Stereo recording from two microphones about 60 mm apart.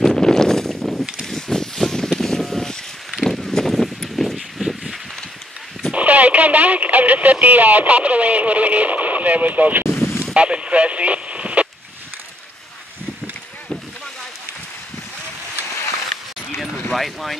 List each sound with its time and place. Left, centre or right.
0.0 s a sound: centre
5.9 s speech: right
9.8 s boat: left
10.3 s speech: centre
16.9 s speech: centre